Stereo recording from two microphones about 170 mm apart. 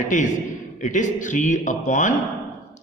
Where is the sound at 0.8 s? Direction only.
50° left (ahead or behind).